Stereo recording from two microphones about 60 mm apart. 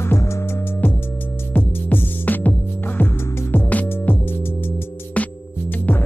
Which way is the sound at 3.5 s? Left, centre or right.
Left.